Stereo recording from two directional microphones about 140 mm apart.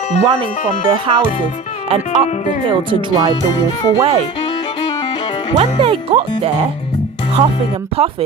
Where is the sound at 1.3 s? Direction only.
50° left (ahead or behind).